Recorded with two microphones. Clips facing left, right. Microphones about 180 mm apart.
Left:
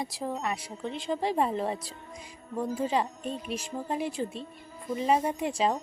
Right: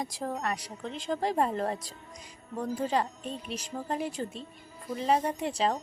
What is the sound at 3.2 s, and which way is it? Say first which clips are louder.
Speech: left 3 dB; 40° left (ahead or behind).